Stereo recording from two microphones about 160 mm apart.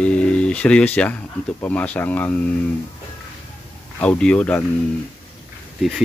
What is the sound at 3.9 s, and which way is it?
Speech, 5° left (ahead or behind).